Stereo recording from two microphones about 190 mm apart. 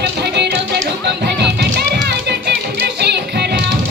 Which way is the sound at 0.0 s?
60° right (ahead or behind).